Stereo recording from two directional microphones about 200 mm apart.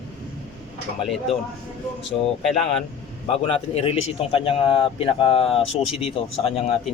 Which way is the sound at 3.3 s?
30° left (ahead or behind).